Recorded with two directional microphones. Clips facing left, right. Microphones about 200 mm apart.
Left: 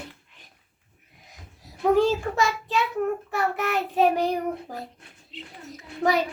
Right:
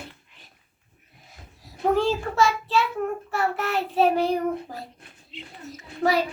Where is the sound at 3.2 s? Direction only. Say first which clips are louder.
Even; 15° left (ahead or behind).